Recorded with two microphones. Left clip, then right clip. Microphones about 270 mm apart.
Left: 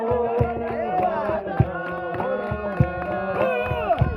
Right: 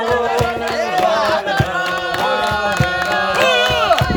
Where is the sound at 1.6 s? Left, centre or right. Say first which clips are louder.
Right 9 dB; right.